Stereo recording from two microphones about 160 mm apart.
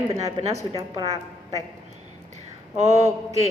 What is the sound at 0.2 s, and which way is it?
Speech, 40° right (ahead or behind).